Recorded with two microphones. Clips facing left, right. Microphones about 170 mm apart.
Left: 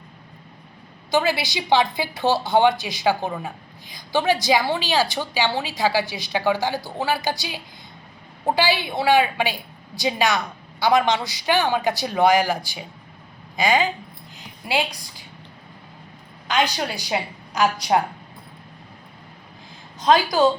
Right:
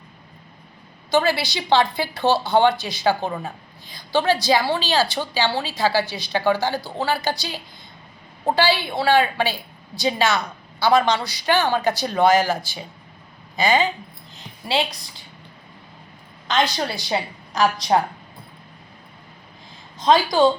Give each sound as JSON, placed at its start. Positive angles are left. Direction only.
{"t": 1.1, "sound": "a woman's voice", "side_deg": 15}
{"t": 16.5, "sound": "a woman's voice", "side_deg": 10}